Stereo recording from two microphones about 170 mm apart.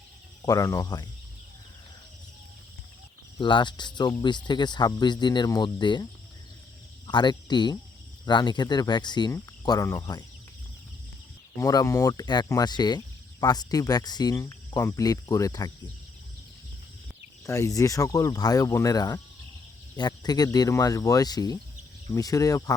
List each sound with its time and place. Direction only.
0.4 s speech: 20° left (ahead or behind)
3.3 s speech: 30° left (ahead or behind)
7.1 s speech: 25° left (ahead or behind)
11.5 s speech: 20° left (ahead or behind)
17.4 s speech: 20° left (ahead or behind)